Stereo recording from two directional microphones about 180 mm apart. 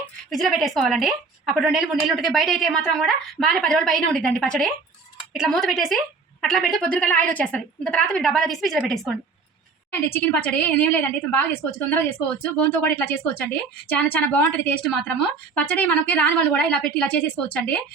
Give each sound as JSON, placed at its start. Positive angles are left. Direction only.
{"t": 0.3, "sound": "a woman's voice", "side_deg": 0}